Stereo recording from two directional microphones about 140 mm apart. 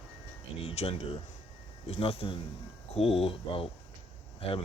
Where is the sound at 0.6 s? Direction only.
45° left (ahead or behind).